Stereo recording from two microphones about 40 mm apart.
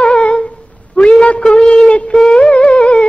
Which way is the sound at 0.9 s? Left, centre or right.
Left.